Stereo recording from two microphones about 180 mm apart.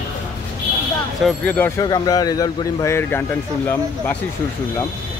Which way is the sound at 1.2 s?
10° left (ahead or behind).